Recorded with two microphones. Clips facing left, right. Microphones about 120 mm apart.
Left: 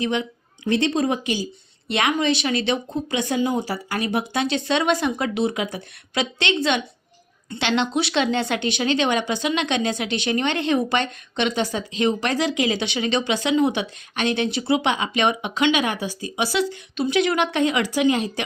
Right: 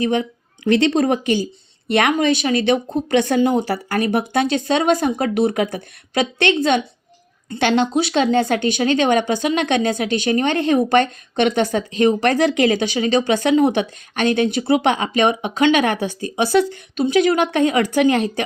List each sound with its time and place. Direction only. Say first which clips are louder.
0.0 s speech: right 5 dB; 45° right (ahead or behind)
0.6 s speech: right 5 dB; 90° right; by 12.8 s 55° right (ahead or behind)
12.8 s speech: right 5 dB; 40° right (ahead or behind)